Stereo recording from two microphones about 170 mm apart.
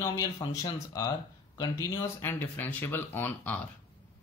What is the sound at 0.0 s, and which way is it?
Speech, 20° left (ahead or behind).